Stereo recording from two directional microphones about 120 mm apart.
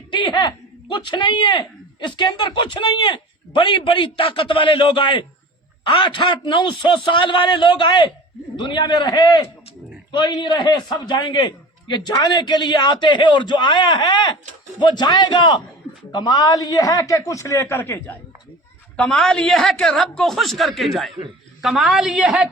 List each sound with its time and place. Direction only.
0.1 s a man's voice: 40° left (ahead or behind); by 18.2 s 20° left (ahead or behind)
18.9 s a man's voice: 10° left (ahead or behind); by 22.4 s 10° right (ahead or behind)